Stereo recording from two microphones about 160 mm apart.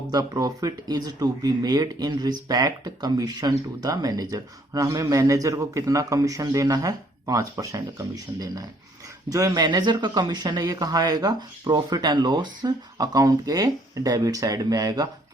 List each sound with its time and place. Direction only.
0.1 s speech: 25° right (ahead or behind)